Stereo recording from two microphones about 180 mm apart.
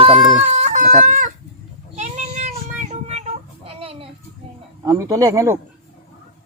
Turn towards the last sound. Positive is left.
turn(degrees=-15)  # may be behind; listen again after turning